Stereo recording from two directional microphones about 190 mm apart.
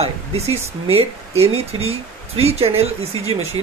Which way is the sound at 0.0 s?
35° right (ahead or behind).